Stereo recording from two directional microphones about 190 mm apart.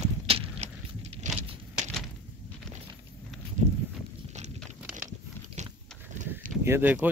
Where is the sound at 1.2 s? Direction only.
40° right (ahead or behind).